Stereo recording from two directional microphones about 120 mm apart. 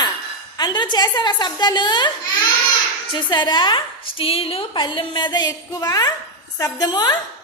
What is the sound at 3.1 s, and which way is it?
Speech, 40° left (ahead or behind).